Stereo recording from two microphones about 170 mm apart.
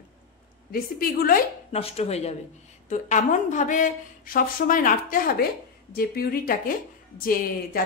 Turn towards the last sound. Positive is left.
turn(degrees=55)  # may be behind; listen again after turning